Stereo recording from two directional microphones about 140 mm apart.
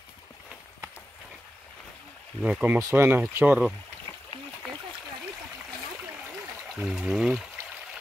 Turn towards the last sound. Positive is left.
turn(degrees=0)  # may be behind; listen again after turning